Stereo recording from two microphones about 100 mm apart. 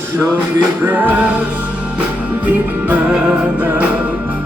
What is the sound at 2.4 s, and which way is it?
Music, 15° right (ahead or behind).